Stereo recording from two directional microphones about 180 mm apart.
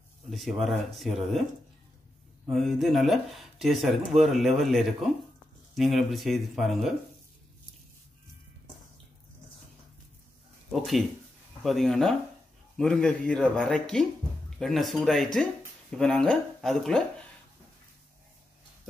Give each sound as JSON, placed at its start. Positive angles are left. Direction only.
{"t": 0.3, "sound": "speech", "side_deg": 0}
{"t": 2.5, "sound": "speech", "side_deg": 0}
{"t": 10.7, "sound": "speech", "side_deg": 0}